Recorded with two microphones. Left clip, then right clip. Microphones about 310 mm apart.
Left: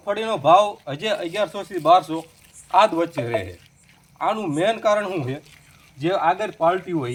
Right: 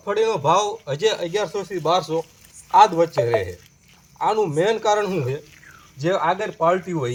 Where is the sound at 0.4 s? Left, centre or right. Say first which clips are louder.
Left 3 dB; centre.